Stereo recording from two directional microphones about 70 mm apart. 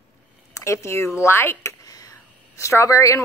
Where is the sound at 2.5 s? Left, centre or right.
Left.